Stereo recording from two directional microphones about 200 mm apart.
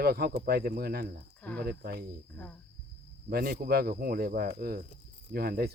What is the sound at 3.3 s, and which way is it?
Speech, 50° right (ahead or behind).